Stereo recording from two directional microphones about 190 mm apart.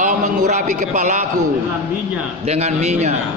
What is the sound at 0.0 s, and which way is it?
A man's voice, 40° right (ahead or behind).